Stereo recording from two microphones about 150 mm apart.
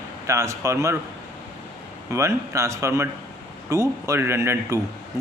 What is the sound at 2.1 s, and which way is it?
Speech, 20° right (ahead or behind).